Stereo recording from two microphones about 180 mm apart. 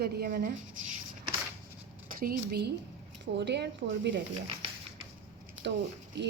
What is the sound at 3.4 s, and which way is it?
Speech, 70° right (ahead or behind).